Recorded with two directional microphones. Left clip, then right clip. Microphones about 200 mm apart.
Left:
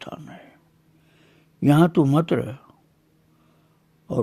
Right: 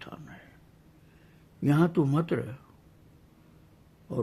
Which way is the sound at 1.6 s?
40° left (ahead or behind).